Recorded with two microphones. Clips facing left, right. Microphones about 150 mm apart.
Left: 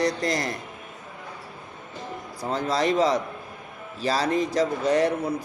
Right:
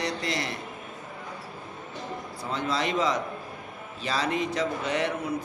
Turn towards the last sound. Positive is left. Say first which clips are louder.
# left 6 dB
turn(degrees=40)  # may be behind; listen again after turning